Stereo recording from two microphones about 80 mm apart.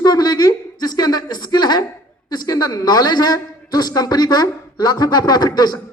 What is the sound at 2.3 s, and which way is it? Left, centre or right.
A woman's voice, left.